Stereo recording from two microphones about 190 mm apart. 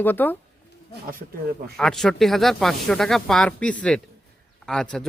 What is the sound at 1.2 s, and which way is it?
Speech, 40° right (ahead or behind).